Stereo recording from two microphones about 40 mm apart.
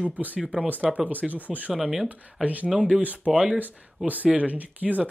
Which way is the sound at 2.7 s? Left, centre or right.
Centre.